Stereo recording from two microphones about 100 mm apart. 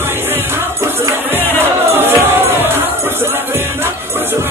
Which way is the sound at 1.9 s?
25° right (ahead or behind).